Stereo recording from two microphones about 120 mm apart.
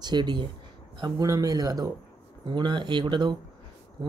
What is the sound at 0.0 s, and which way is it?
Speech, 35° right (ahead or behind).